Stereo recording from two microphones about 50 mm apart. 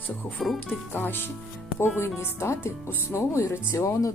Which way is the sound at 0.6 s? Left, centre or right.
Left.